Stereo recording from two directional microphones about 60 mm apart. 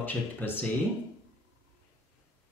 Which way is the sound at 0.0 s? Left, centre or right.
Left.